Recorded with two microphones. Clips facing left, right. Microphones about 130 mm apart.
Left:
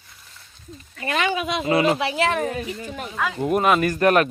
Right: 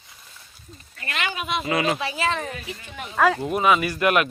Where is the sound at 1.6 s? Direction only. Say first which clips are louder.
Left 4 dB; 30° left (ahead or behind).